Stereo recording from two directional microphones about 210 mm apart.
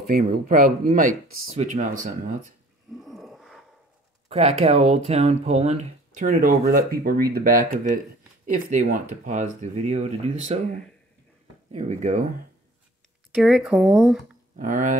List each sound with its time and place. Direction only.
0.0 s speech: 45° right (ahead or behind)
2.9 s a sound: centre (ahead or behind)
4.3 s speech: 30° right (ahead or behind); by 7.6 s 45° right (ahead or behind)
7.7 s speech: 35° right (ahead or behind)
11.7 s speech: 35° right (ahead or behind)
13.3 s speech: centre (ahead or behind)
14.6 s speech: 40° right (ahead or behind)